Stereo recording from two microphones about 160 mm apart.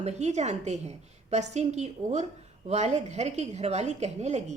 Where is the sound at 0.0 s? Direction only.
45° right (ahead or behind).